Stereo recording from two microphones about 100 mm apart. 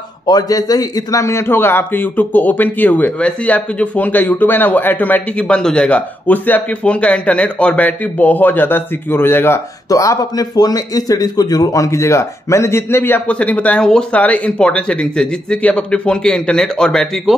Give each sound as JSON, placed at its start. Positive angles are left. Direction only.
{"t": 0.3, "sound": "a man's voice", "side_deg": 40}
{"t": 9.8, "sound": "a man's voice", "side_deg": 35}